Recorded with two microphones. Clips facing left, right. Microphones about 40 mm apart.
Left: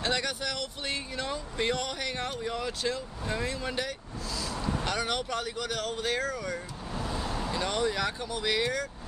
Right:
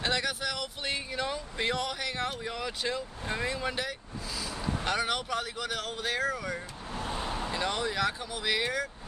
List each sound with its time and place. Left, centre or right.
0.0 s speech: centre
4.4 s vehicle: centre
4.8 s speech: centre
7.0 s vehicle: right
7.5 s speech: centre